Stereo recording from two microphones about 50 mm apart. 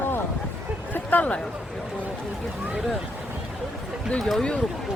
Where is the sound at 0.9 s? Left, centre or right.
Left.